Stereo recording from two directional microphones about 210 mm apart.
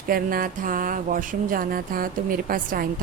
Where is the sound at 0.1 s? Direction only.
45° right (ahead or behind).